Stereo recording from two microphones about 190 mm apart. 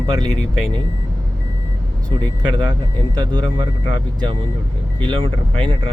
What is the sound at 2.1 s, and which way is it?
Speech, 25° right (ahead or behind).